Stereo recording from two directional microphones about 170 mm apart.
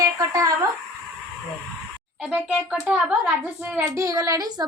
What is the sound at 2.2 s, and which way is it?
Speech, 5° right (ahead or behind).